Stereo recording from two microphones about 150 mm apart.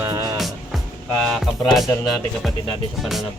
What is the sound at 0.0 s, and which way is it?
Music, 20° right (ahead or behind).